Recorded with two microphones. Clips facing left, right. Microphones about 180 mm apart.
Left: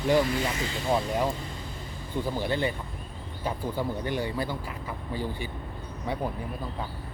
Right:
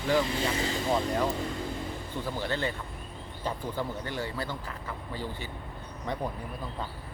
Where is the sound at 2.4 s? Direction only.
15° left (ahead or behind).